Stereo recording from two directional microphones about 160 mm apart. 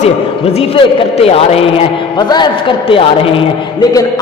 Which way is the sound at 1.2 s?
40° left (ahead or behind).